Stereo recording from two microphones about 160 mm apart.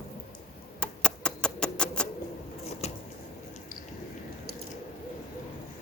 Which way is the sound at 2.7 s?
40° left (ahead or behind).